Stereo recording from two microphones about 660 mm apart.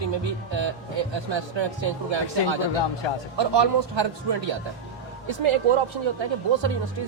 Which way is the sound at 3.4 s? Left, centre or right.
Right.